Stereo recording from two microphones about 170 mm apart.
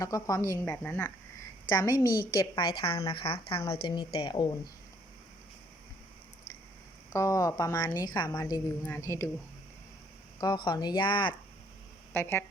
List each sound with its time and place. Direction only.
0.0 s a woman's voice: 20° left (ahead or behind)
7.1 s a woman's voice: 20° left (ahead or behind)
10.4 s speech: 25° left (ahead or behind)
12.1 s a woman's voice: 10° left (ahead or behind)